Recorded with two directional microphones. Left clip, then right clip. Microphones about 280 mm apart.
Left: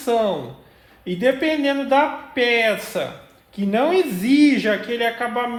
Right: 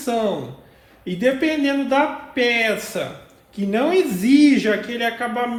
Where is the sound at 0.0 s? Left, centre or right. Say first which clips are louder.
Left 2 dB; left.